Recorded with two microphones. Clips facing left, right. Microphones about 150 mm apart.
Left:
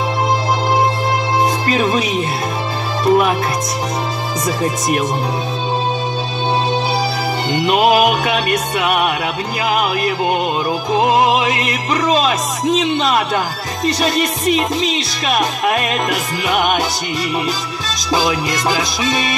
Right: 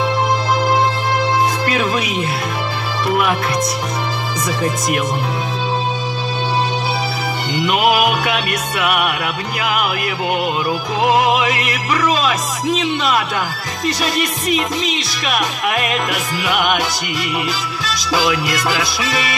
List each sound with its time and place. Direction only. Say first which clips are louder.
1.8 s music: left 4 dB; 25° left (ahead or behind)
3.1 s music: left 4 dB; 25° left (ahead or behind)
4.5 s music: left 1 dB; 25° left (ahead or behind)
8.3 s music: left 3 dB; 30° left (ahead or behind)
11.0 s music: left 1 dB; 25° left (ahead or behind)
17.8 s music: left 1 dB; 25° left (ahead or behind)